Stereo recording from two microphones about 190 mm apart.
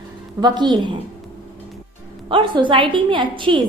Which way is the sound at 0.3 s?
20° right (ahead or behind).